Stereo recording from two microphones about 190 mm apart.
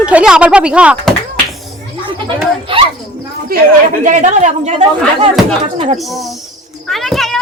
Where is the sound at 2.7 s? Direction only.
25° right (ahead or behind).